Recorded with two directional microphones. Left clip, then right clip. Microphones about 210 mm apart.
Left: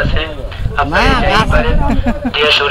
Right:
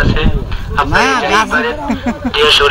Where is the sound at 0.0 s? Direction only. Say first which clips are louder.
Right 2 dB; 40° right (ahead or behind).